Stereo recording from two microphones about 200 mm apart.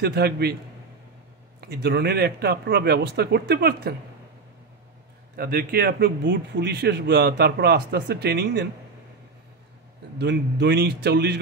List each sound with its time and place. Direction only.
0.0 s a man's voice: 55° right (ahead or behind)
1.6 s a man's voice: 55° right (ahead or behind)
5.3 s a man's voice: 50° right (ahead or behind)
10.1 s a man's voice: 60° right (ahead or behind)